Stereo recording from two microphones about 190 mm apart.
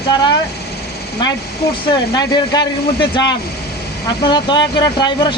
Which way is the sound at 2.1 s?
20° left (ahead or behind).